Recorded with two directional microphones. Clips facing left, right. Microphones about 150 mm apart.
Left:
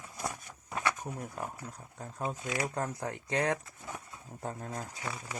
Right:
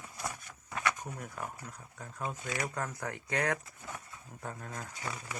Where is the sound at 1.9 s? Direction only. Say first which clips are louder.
Left 3 dB; 30° left (ahead or behind).